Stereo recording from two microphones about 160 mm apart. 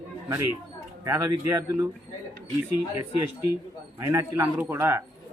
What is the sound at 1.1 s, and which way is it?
Speech, 20° right (ahead or behind).